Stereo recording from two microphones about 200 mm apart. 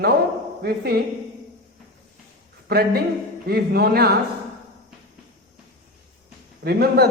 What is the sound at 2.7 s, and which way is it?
A man's voice, 50° right (ahead or behind).